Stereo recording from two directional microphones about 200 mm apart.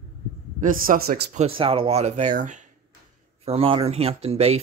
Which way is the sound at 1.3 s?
30° right (ahead or behind).